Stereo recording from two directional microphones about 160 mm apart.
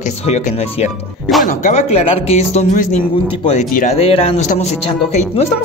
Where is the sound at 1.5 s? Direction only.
50° left (ahead or behind).